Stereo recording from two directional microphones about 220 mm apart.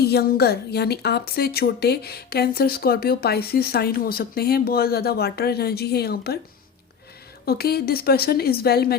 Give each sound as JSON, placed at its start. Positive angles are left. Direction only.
{"t": 0.0, "sound": "a woman's voice", "side_deg": 45}
{"t": 7.4, "sound": "a woman's voice", "side_deg": 45}